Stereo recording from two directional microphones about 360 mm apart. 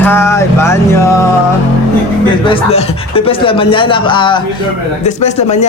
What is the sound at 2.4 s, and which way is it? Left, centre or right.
Speech, centre.